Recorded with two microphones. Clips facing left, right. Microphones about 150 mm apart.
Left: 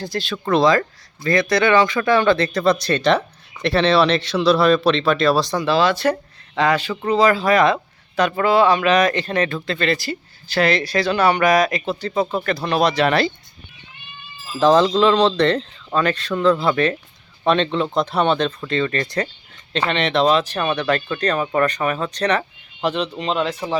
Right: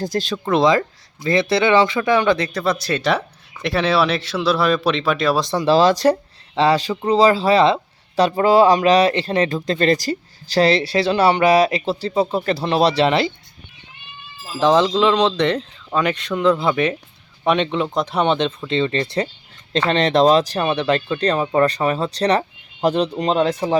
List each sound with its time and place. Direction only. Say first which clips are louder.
0.0 s speech: right 3 dB; 45° right (ahead or behind)
0.5 s speech: even; 20° right (ahead or behind)
5.5 s speech: right 3 dB; 35° right (ahead or behind)
14.6 s speech: left 1 dB; 15° right (ahead or behind)
19.9 s speech: right 3 dB; 40° right (ahead or behind)